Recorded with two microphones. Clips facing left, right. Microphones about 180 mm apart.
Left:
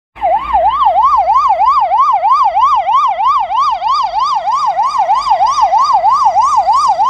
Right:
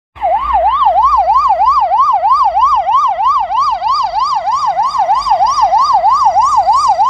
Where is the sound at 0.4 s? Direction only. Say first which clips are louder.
Even; 25° left (ahead or behind).